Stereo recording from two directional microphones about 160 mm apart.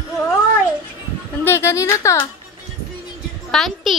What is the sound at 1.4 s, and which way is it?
Speech, 15° left (ahead or behind).